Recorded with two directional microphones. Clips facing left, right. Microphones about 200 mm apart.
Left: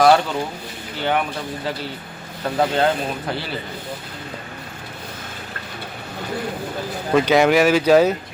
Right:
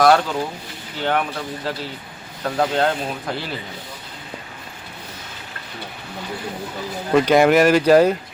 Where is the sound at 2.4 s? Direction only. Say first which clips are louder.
Left 1 dB; 5° left (ahead or behind).